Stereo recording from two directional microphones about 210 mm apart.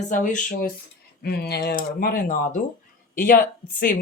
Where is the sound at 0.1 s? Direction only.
35° left (ahead or behind).